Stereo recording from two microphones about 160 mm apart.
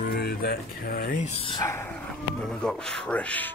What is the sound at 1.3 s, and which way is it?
Speech, 35° left (ahead or behind).